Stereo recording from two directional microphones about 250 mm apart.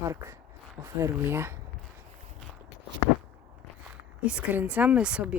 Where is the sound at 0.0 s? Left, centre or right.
Centre.